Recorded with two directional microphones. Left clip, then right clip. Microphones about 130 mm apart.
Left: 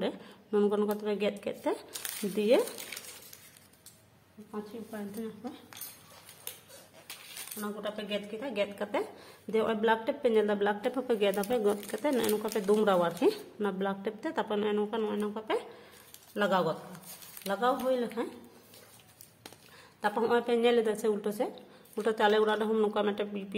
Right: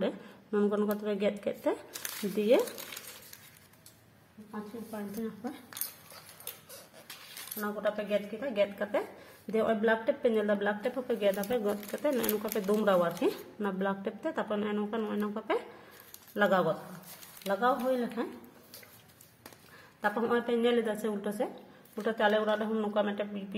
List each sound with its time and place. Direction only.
0.0 s speech: centre (ahead or behind)
7.5 s speech: 20° right (ahead or behind)
7.9 s a woman's voice: 10° right (ahead or behind)
8.7 s speech: centre (ahead or behind); by 10.9 s 20° left (ahead or behind)
10.9 s speech: 35° left (ahead or behind)
11.6 s speech: 15° left (ahead or behind)
20.0 s a woman's voice: centre (ahead or behind)
20.2 s speech: 15° left (ahead or behind)
21.9 s speech: 25° left (ahead or behind)